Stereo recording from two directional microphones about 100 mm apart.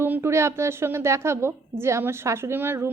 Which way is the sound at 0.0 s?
25° right (ahead or behind).